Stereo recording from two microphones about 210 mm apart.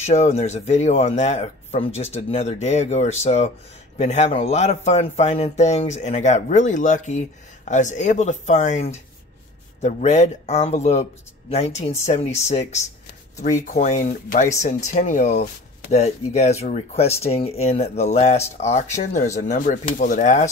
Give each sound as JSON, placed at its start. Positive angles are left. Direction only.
{"t": 0.0, "sound": "speech", "side_deg": 30}